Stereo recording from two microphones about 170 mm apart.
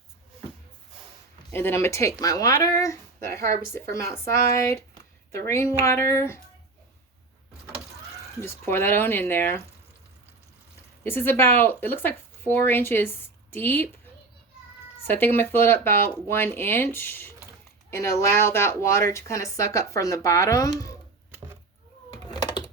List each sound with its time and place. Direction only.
1.5 s speech: 15° left (ahead or behind)
5.8 s speech: 15° left (ahead or behind)
8.4 s speech: 15° left (ahead or behind)
11.0 s speech: 10° left (ahead or behind)
15.0 s speech: 10° left (ahead or behind)
22.3 s typing: 25° left (ahead or behind)